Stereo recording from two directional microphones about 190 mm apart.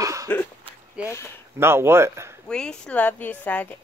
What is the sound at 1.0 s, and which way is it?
Speech, 15° left (ahead or behind).